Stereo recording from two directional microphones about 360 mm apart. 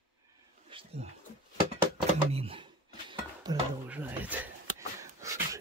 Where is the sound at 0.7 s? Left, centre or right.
Centre.